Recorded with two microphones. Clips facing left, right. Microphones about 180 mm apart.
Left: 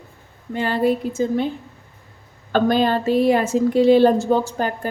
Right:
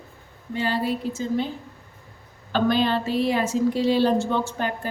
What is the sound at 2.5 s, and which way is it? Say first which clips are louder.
A woman's voice: left 4 dB; 50° left (ahead or behind).